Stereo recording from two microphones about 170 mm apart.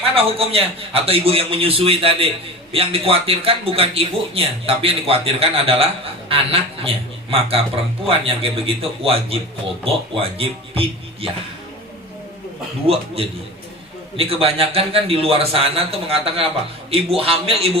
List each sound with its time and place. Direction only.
0.2 s a man's voice: 35° right (ahead or behind)
12.9 s a man's voice: 35° right (ahead or behind)
14.2 s a man's voice: 35° right (ahead or behind)